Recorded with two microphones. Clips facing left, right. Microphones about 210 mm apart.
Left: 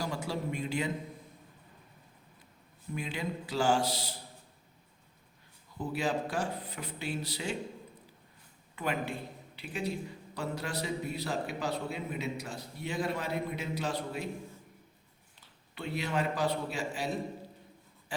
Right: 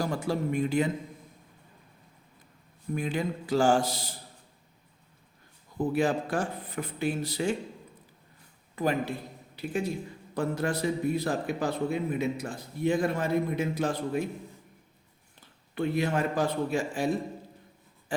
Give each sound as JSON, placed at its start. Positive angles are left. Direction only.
{"t": 0.0, "sound": "speech", "side_deg": -50}
{"t": 2.9, "sound": "a man's voice", "side_deg": -50}
{"t": 5.7, "sound": "a man's voice", "side_deg": -50}
{"t": 8.7, "sound": "a man's voice", "side_deg": -40}
{"t": 15.4, "sound": "a man's voice", "side_deg": -50}